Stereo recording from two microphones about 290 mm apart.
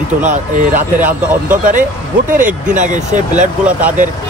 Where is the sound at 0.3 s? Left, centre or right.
Right.